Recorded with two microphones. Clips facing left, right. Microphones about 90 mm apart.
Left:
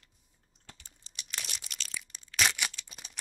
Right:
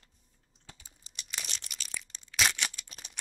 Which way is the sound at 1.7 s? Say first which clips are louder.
Left 1 dB; 5° right (ahead or behind).